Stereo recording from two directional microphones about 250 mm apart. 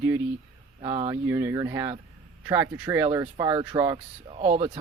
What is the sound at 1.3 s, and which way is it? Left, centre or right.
Speech, centre.